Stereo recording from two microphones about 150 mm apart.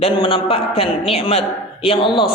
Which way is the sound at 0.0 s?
35° left (ahead or behind).